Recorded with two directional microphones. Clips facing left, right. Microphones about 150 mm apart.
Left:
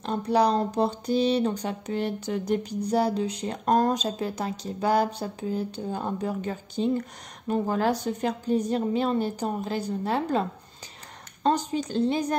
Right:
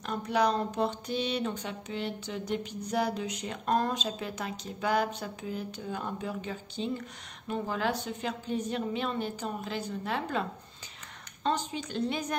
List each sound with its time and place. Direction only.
0.0 s speech: 30° left (ahead or behind)
11.4 s speech: 40° left (ahead or behind)